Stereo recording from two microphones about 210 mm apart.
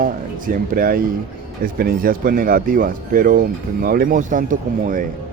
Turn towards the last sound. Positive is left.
turn(degrees=-40)  # may be behind; listen again after turning